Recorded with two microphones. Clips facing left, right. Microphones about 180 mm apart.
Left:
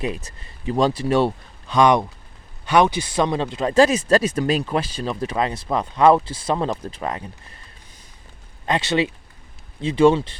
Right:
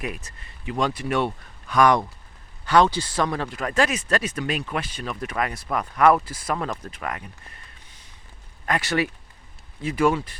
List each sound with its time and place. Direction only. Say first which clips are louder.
0.3 s speech: left 6 dB; 35° left (ahead or behind)
8.6 s speech: left 3 dB; 25° left (ahead or behind)